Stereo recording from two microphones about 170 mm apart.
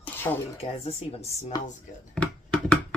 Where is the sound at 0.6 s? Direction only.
35° left (ahead or behind).